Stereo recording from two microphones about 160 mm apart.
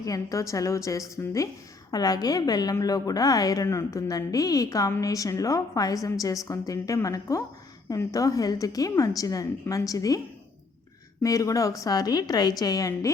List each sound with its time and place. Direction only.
0.0 s a woman's voice: 20° left (ahead or behind)
11.2 s a woman's voice: 20° left (ahead or behind)